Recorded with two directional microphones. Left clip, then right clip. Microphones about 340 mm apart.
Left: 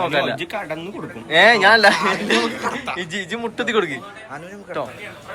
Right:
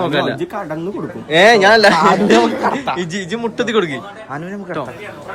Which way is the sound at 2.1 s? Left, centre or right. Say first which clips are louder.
Right 7 dB; right.